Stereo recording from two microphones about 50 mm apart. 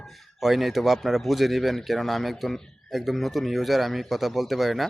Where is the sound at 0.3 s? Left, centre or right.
Centre.